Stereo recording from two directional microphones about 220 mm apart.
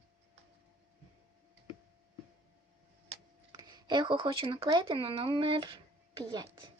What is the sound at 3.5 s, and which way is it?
Speech, 20° right (ahead or behind).